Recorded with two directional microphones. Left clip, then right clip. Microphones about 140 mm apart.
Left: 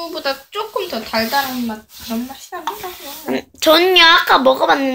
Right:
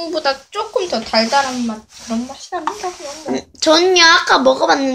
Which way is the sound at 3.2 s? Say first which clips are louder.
Left 1 dB; 10° left (ahead or behind).